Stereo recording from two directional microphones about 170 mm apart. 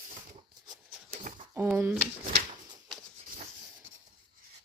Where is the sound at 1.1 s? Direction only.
50° right (ahead or behind).